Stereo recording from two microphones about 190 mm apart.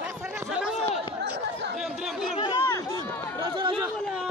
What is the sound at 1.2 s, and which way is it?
Chatter, 60° right (ahead or behind).